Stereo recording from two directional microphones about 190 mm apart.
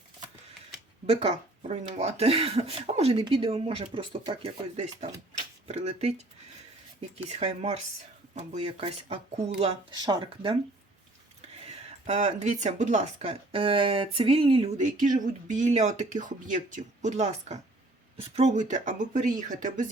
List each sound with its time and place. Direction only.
1.0 s speech: 35° right (ahead or behind)
7.3 s speech: 35° right (ahead or behind)
11.6 s speech: 35° right (ahead or behind)